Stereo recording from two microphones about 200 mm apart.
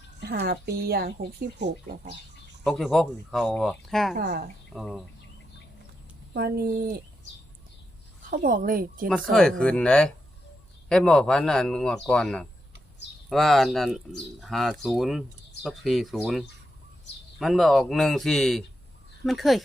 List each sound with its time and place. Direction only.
0.2 s speech: 55° right (ahead or behind)
2.6 s speech: centre (ahead or behind)
4.1 s speech: 55° right (ahead or behind)
4.7 s speech: centre (ahead or behind)
6.3 s speech: 50° right (ahead or behind)
8.3 s speech: 45° right (ahead or behind)
9.3 s speech: 5° left (ahead or behind)